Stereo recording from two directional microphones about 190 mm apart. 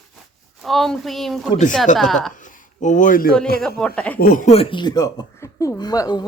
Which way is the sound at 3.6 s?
5° left (ahead or behind).